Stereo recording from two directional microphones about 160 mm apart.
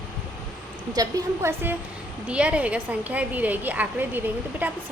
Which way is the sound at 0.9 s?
20° right (ahead or behind).